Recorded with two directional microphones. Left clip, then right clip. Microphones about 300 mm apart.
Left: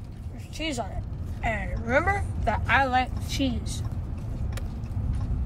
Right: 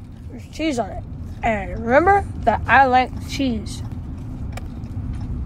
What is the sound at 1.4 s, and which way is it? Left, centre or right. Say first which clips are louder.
Speech: right 8 dB; centre.